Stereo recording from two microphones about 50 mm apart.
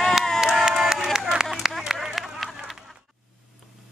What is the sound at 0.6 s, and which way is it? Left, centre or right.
Run, centre.